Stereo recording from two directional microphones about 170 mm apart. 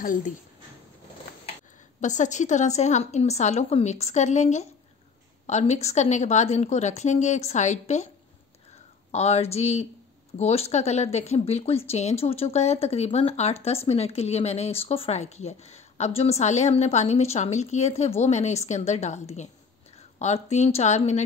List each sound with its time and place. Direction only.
0.0 s a woman's voice: 50° left (ahead or behind)
2.0 s a woman's voice: 45° left (ahead or behind)
9.1 s a woman's voice: 40° left (ahead or behind)